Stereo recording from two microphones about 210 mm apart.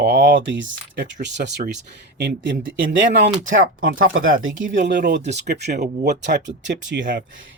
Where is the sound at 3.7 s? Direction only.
40° right (ahead or behind).